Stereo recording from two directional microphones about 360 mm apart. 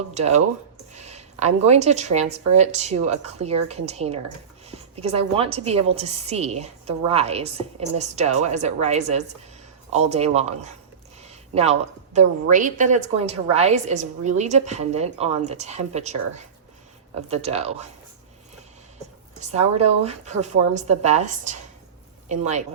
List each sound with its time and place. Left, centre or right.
0.1 s a woman's voice: centre
19.4 s a woman's voice: centre